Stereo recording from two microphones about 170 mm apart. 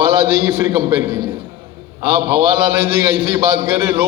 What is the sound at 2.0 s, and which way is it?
A man's voice, 30° right (ahead or behind).